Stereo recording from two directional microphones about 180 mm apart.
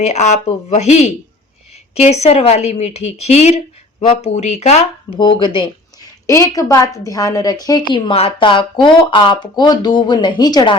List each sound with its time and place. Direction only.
0.0 s a woman's voice: 40° left (ahead or behind); by 10.8 s 20° left (ahead or behind)